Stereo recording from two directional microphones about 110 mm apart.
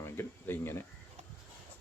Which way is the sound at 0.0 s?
20° left (ahead or behind).